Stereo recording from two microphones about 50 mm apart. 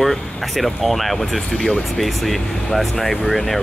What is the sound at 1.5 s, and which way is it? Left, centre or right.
Speech, centre.